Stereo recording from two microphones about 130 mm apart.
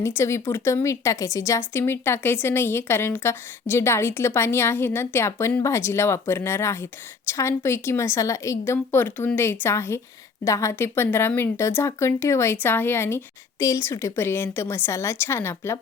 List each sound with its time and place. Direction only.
0.0 s a woman's voice: 20° left (ahead or behind)